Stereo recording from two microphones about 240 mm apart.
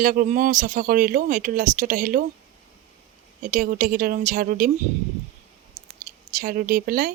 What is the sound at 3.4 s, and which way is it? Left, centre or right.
Speech, right.